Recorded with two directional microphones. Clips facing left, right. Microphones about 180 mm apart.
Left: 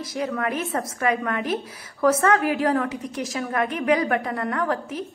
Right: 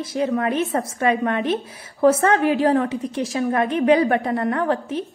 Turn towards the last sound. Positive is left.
turn(degrees=-25)  # may be behind; listen again after turning